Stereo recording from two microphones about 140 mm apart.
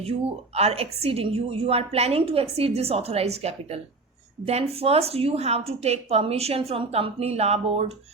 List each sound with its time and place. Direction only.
0.5 s a woman's voice: 45° right (ahead or behind)